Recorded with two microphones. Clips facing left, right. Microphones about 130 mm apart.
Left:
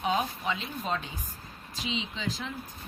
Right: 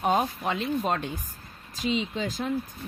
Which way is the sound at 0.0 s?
50° right (ahead or behind).